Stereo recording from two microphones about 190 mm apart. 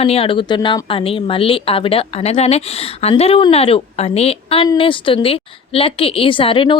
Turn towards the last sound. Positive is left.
turn(degrees=25)  # may be behind; listen again after turning